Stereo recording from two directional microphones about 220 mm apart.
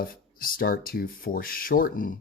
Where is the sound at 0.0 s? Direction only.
40° left (ahead or behind).